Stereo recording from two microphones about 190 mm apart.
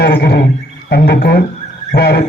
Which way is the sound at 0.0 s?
60° left (ahead or behind).